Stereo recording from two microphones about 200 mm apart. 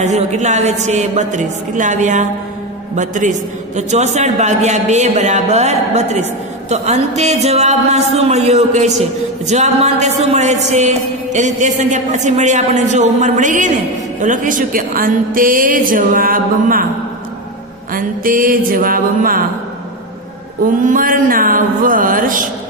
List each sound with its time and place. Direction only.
0.0 s speech: 35° right (ahead or behind)
17.9 s speech: 45° right (ahead or behind)
20.8 s speech: 45° right (ahead or behind)